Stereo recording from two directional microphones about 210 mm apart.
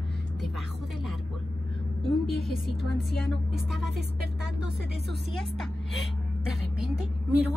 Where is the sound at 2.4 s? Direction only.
Centre (ahead or behind).